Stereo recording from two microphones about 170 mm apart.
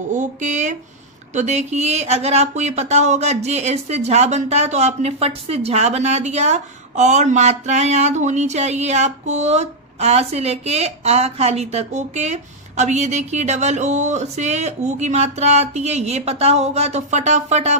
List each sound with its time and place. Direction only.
0.1 s speech: 45° right (ahead or behind)